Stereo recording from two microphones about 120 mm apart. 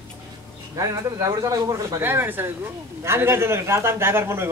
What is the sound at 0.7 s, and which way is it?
A man's voice, 30° right (ahead or behind).